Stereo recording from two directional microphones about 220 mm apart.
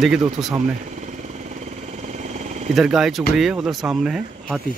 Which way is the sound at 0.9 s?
30° right (ahead or behind).